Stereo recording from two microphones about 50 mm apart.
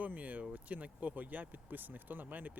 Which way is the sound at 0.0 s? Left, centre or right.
Right.